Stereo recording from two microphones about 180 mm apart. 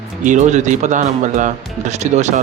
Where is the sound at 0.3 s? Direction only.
40° right (ahead or behind).